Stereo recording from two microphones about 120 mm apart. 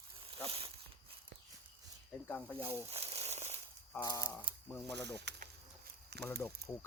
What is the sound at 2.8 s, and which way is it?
Crumpling, 60° right (ahead or behind).